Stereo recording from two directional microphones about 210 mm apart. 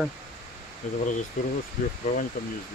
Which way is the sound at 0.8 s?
35° left (ahead or behind).